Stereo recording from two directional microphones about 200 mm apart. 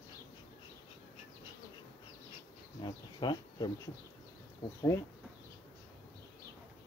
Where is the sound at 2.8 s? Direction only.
20° left (ahead or behind).